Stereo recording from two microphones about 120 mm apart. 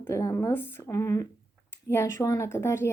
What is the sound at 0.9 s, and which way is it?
Speech, 30° left (ahead or behind).